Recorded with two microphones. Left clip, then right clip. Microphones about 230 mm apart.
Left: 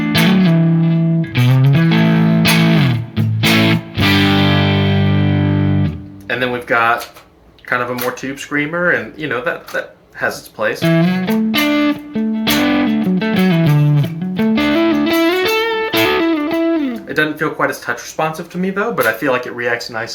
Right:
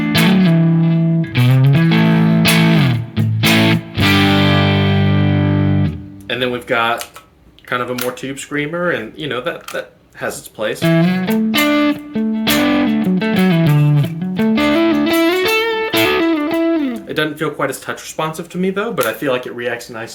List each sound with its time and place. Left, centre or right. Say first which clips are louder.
0.0 s music: even; centre
6.2 s music: left 1 dB; right
8.2 s speech: left 2 dB; right
10.8 s music: even; centre
17.1 s speech: left 4 dB; right